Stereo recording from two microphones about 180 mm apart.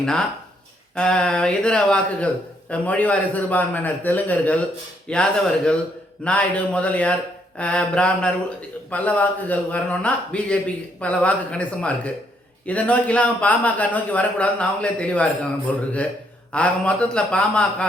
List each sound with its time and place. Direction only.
0.0 s a man's voice: 5° left (ahead or behind)
6.2 s a man's voice: 5° left (ahead or behind)